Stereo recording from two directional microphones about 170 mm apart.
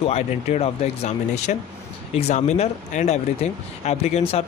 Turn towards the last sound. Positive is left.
turn(degrees=40)  # may be behind; listen again after turning